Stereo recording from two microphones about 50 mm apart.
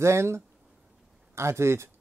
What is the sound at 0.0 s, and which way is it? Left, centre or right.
Speech, right.